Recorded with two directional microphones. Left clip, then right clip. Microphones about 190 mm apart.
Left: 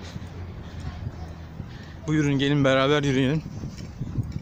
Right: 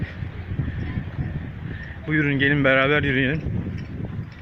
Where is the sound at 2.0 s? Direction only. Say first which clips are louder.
Right 4 dB; 15° left (ahead or behind).